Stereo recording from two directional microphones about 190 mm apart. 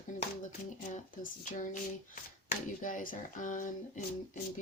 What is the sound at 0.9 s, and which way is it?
Speech, 40° left (ahead or behind).